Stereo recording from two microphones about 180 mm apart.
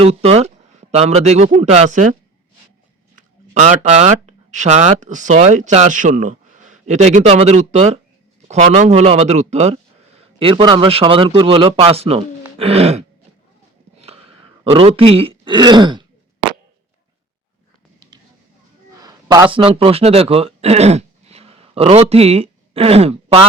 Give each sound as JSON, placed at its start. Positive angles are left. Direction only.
{"t": 0.0, "sound": "speech", "side_deg": -35}
{"t": 3.2, "sound": "a sound", "side_deg": -40}
{"t": 3.8, "sound": "speech", "side_deg": -40}
{"t": 10.4, "sound": "a man's voice", "side_deg": -25}
{"t": 14.0, "sound": "a sound", "side_deg": -35}
{"t": 18.9, "sound": "a man's voice", "side_deg": -20}